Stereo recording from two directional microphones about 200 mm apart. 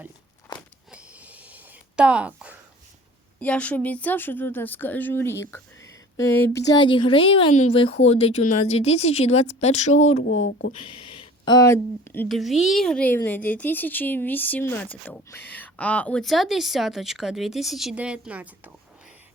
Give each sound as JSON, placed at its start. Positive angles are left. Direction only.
{"t": 0.9, "sound": "a sound", "side_deg": -5}
{"t": 3.4, "sound": "speech", "side_deg": 5}
{"t": 6.7, "sound": "a woman's voice", "side_deg": 25}
{"t": 10.2, "sound": "speech", "side_deg": 80}
{"t": 10.7, "sound": "speech", "side_deg": 25}